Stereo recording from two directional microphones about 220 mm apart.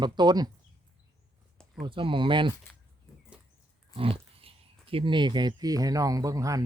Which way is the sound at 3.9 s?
25° right (ahead or behind).